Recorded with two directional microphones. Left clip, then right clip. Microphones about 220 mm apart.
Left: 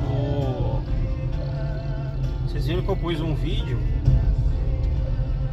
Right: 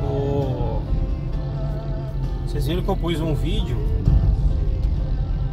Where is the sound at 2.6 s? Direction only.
30° right (ahead or behind).